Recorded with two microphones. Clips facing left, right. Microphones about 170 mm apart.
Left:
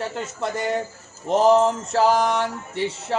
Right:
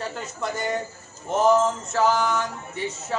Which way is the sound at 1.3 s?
30° left (ahead or behind).